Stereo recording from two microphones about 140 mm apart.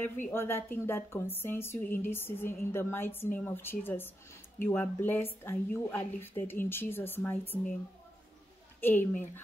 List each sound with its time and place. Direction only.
0.0 s speech: 15° left (ahead or behind)
8.8 s speech: 15° left (ahead or behind)